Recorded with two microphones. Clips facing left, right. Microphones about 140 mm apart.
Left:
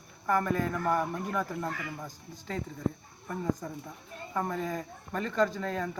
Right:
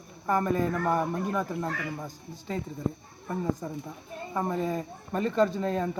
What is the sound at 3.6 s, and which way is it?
Speech, 20° right (ahead or behind).